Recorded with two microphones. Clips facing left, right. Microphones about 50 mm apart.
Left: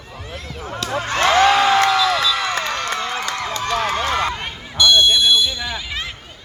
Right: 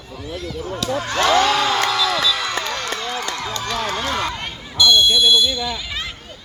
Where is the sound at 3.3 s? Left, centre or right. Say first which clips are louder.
Left 3 dB; left.